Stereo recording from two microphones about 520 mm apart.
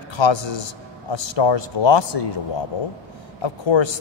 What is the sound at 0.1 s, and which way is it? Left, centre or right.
A man's voice, left.